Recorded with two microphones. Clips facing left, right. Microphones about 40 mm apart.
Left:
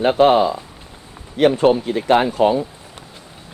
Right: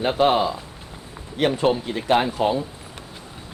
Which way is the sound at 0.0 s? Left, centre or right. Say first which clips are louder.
Left 5 dB; left.